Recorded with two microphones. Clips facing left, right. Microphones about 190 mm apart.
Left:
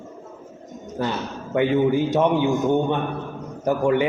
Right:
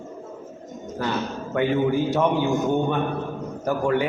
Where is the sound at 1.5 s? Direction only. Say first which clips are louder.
Left 3 dB; 15° left (ahead or behind).